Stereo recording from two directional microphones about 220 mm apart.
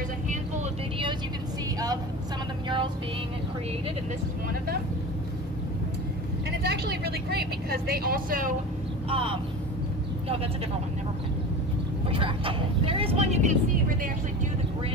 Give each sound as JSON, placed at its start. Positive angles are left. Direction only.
{"t": 0.3, "sound": "vehicle", "side_deg": -30}
{"t": 6.6, "sound": "a woman's voice", "side_deg": -45}
{"t": 9.1, "sound": "speech", "side_deg": -25}
{"t": 12.1, "sound": "speech", "side_deg": -25}